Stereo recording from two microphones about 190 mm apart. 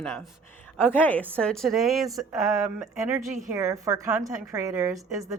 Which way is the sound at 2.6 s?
10° right (ahead or behind).